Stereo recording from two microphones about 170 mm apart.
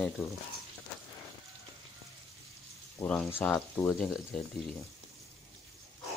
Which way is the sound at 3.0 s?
10° left (ahead or behind).